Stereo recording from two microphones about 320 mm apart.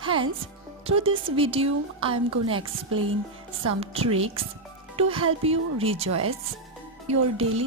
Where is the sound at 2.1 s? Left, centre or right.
Right.